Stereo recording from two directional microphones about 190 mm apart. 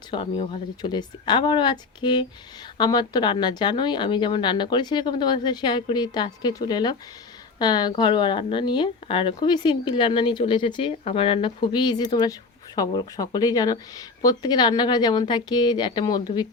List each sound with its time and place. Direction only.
0.1 s a woman's voice: 30° left (ahead or behind)